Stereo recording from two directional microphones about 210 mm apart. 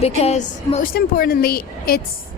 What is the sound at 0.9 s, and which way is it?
Speech, 45° left (ahead or behind).